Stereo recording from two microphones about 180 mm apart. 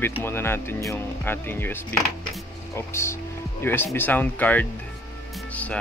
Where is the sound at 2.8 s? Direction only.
15° left (ahead or behind).